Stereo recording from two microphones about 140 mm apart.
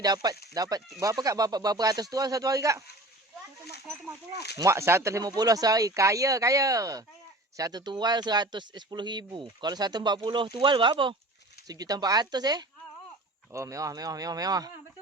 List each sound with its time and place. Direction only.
0.0 s speech: 30° right (ahead or behind)
4.5 s speech: 20° right (ahead or behind)